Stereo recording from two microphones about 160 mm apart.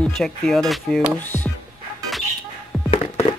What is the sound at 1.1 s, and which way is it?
Music, 10° left (ahead or behind).